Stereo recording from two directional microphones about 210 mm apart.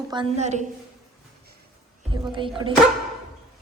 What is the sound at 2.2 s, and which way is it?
Speech, 20° right (ahead or behind).